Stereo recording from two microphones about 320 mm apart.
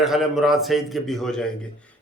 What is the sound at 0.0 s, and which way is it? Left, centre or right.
A man's voice, centre.